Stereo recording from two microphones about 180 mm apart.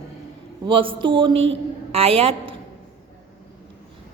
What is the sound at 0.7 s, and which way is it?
A woman's voice, 30° right (ahead or behind).